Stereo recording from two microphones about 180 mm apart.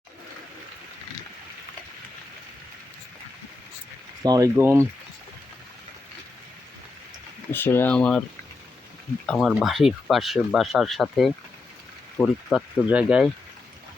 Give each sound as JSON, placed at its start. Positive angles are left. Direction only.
{"t": 4.2, "sound": "speech", "side_deg": -20}
{"t": 7.5, "sound": "speech", "side_deg": 10}
{"t": 9.2, "sound": "speech", "side_deg": 0}
{"t": 12.8, "sound": "speech", "side_deg": -5}